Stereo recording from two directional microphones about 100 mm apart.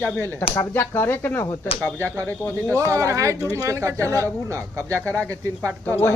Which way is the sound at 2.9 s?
30° right (ahead or behind).